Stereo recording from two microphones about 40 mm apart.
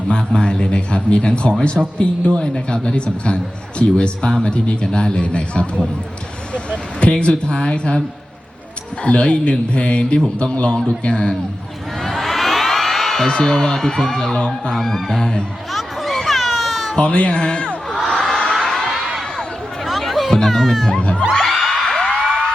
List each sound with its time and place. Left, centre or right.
0.1 s a man's voice: left
9.0 s a man's voice: left
12.0 s crowd: centre
13.2 s speech: centre
14.8 s speech: centre
15.7 s a sound: centre
17.0 s a man's voice: left
17.8 s crowd: centre
18.6 s a sound: centre
19.4 s music: centre
21.0 s a man's voice: left
21.3 s music: centre